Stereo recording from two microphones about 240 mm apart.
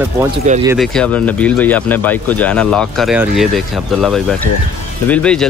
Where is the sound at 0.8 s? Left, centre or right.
Centre.